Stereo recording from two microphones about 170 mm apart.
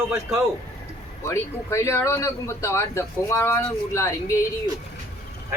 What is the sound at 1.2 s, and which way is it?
Speech, 15° left (ahead or behind).